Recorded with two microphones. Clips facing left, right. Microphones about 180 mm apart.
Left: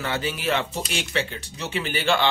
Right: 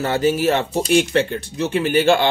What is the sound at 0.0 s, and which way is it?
Speech, 45° right (ahead or behind).